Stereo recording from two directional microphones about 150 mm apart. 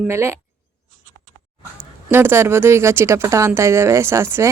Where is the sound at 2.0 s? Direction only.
15° right (ahead or behind).